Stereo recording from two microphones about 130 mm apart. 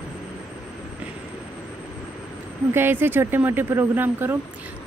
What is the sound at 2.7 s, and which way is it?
Speech, 15° right (ahead or behind).